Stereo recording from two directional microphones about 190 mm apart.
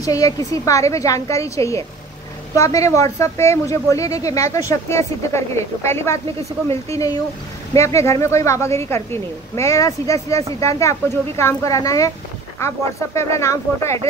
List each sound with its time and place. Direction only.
0.0 s speech: 20° left (ahead or behind)